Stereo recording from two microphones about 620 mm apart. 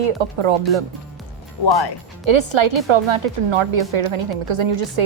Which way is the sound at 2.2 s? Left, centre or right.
Right.